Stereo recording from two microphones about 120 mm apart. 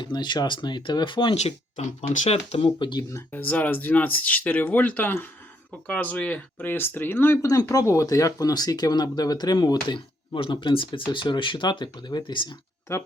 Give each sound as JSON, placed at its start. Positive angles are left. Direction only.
{"t": 0.0, "sound": "speech", "side_deg": 40}
{"t": 1.4, "sound": "speech", "side_deg": 65}
{"t": 3.3, "sound": "speech", "side_deg": 15}
{"t": 7.4, "sound": "speech", "side_deg": 30}
{"t": 12.9, "sound": "speech", "side_deg": 20}